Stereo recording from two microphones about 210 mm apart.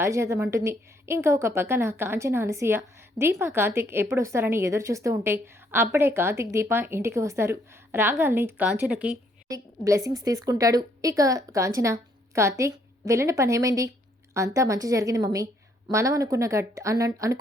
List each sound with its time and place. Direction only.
0.0 s a woman's voice: 15° right (ahead or behind)